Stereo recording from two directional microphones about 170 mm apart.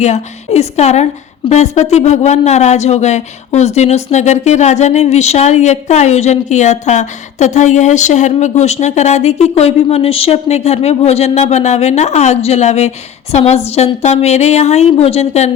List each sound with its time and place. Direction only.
0.0 s speech: 40° left (ahead or behind)